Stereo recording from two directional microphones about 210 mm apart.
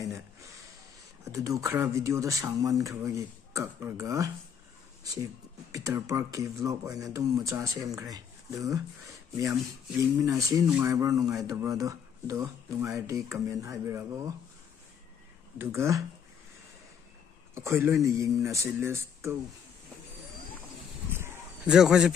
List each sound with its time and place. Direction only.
1.2 s speech: 15° right (ahead or behind)
15.5 s speech: 10° right (ahead or behind)
17.6 s speech: 10° right (ahead or behind)
21.1 s a sound: 10° right (ahead or behind)